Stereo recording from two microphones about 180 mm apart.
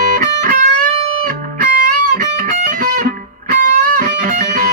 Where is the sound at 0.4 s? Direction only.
50° right (ahead or behind).